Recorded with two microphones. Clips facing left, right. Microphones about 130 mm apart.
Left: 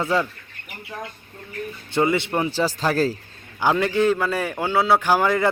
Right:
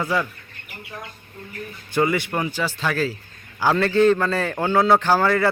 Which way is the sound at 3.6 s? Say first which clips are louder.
Right 2 dB; 15° left (ahead or behind).